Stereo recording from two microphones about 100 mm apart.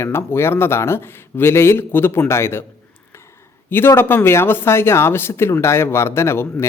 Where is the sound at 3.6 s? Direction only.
25° left (ahead or behind).